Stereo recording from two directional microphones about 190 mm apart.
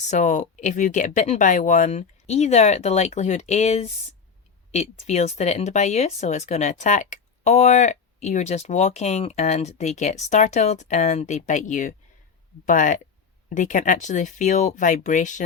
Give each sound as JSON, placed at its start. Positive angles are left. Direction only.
{"t": 0.0, "sound": "speech", "side_deg": 40}